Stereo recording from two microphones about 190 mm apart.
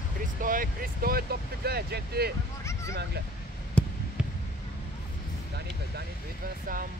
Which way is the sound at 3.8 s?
5° left (ahead or behind).